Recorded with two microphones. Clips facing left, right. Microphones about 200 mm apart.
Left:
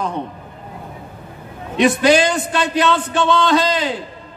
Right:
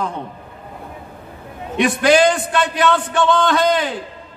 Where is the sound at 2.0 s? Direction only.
55° right (ahead or behind).